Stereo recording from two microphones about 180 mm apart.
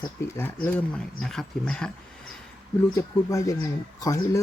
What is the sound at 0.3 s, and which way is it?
Speech, 10° left (ahead or behind).